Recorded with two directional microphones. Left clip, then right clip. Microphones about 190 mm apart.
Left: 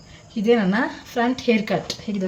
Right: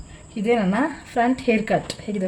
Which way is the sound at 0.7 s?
5° right (ahead or behind).